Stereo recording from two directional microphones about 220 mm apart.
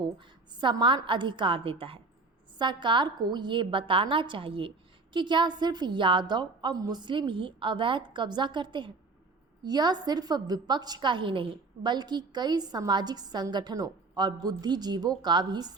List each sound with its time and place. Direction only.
0.6 s a woman's voice: 20° right (ahead or behind)